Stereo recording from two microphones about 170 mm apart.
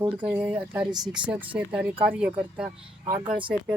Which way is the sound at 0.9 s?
25° right (ahead or behind).